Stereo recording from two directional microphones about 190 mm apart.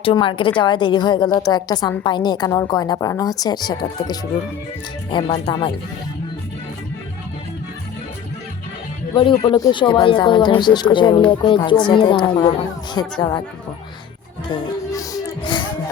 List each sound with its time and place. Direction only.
0.0 s a woman's voice: 25° left (ahead or behind)
9.4 s a woman's voice: 25° left (ahead or behind)
14.4 s music: 25° left (ahead or behind)